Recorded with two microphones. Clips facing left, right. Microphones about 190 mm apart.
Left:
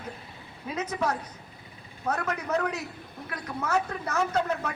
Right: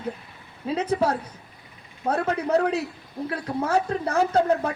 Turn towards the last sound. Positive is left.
turn(degrees=-30)  # may be behind; listen again after turning